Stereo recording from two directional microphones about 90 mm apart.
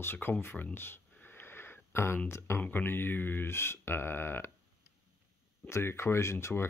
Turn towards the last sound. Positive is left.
turn(degrees=30)  # may be behind; listen again after turning